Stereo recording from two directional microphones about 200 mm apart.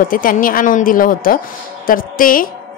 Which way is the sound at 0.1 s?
45° left (ahead or behind).